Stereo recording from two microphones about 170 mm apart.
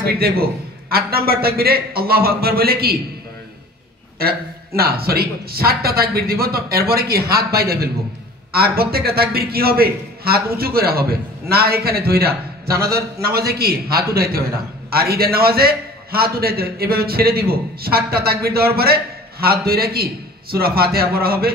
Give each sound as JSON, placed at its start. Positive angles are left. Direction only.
{"t": 0.0, "sound": "a man's voice", "side_deg": -65}
{"t": 4.2, "sound": "a man's voice", "side_deg": -65}